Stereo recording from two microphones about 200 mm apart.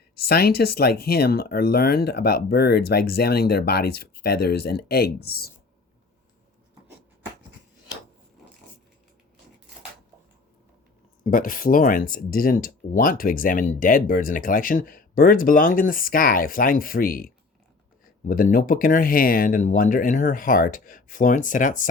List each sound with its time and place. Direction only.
0.3 s speech: 50° left (ahead or behind)
11.2 s speech: 45° left (ahead or behind)